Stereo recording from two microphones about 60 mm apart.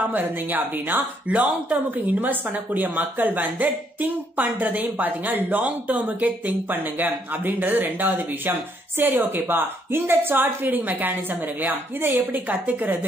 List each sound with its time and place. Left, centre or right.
0.0 s a woman's voice: right